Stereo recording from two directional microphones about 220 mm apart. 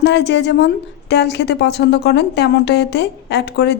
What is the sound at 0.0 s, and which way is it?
A woman's voice, 50° left (ahead or behind).